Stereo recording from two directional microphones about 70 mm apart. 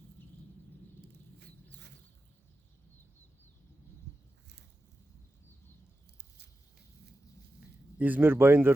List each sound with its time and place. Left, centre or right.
7.9 s speech: right